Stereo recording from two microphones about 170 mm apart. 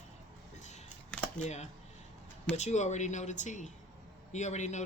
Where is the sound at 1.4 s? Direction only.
40° left (ahead or behind).